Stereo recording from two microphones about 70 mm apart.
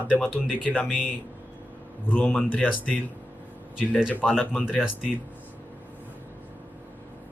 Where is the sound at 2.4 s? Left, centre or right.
Left.